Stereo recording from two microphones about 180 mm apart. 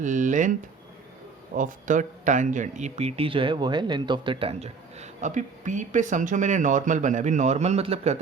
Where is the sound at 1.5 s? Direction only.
45° right (ahead or behind).